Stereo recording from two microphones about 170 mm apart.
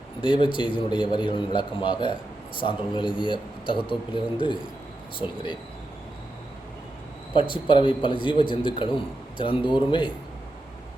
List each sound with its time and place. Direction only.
0.2 s a man's voice: 30° left (ahead or behind)
5.2 s a man's voice: 25° left (ahead or behind)
7.3 s a man's voice: 30° left (ahead or behind)